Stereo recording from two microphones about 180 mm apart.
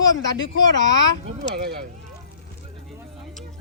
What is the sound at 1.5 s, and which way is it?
Speech, 65° right (ahead or behind).